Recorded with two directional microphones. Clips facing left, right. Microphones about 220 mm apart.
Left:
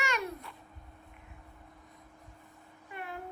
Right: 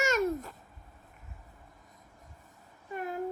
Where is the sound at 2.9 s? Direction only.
40° right (ahead or behind).